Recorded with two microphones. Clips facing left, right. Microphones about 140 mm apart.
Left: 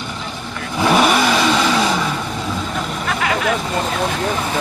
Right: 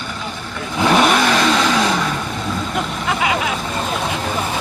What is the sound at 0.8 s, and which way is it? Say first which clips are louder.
Vehicle: even; 5° left (ahead or behind).